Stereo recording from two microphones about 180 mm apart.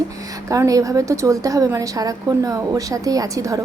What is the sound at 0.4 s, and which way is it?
A woman's voice, 20° right (ahead or behind).